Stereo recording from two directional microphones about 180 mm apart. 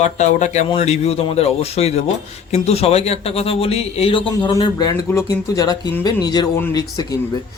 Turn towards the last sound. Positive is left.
turn(degrees=20)  # may be behind; listen again after turning